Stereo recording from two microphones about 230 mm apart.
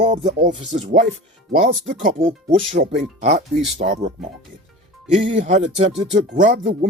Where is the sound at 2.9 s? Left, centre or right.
Right.